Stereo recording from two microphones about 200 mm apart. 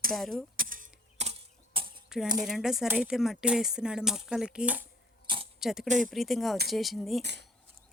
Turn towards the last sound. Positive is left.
turn(degrees=0)  # may be behind; listen again after turning